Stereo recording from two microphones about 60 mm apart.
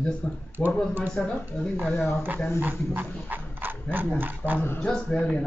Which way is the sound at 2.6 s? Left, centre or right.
Right.